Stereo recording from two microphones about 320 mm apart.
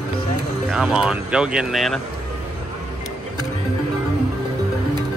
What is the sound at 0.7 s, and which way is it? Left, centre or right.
Speech, centre.